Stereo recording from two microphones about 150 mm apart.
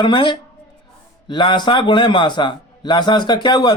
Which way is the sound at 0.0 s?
30° left (ahead or behind).